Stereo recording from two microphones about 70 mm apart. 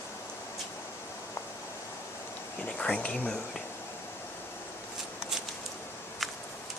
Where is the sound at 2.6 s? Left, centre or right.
Centre.